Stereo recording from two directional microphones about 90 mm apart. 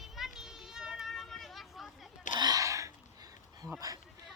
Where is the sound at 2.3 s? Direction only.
45° right (ahead or behind).